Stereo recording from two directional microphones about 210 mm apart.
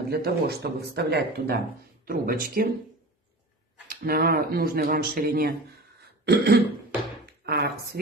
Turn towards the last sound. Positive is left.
turn(degrees=-50)  # may be behind; listen again after turning